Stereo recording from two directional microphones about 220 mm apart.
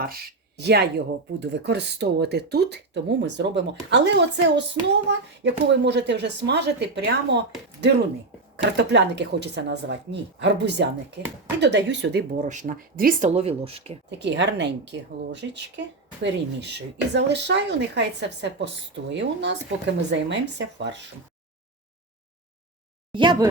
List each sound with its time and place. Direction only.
0.0 s speech: 45° right (ahead or behind)
13.3 s speech: 25° right (ahead or behind)
14.2 s speech: 55° right (ahead or behind)
23.1 s speech: 20° right (ahead or behind)